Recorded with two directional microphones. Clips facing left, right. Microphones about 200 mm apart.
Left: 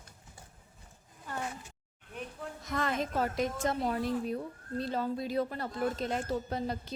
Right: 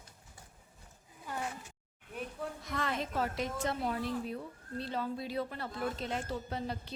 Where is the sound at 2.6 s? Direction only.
45° left (ahead or behind).